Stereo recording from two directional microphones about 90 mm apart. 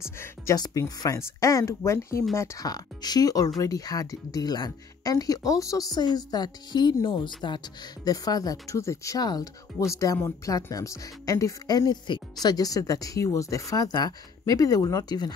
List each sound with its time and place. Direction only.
0.0 s speech: 30° left (ahead or behind)
0.6 s speech: 45° left (ahead or behind); by 2.6 s 30° left (ahead or behind)
2.6 s speech: 45° left (ahead or behind)
10.1 s speech: 30° left (ahead or behind)
10.5 s speech: 40° left (ahead or behind)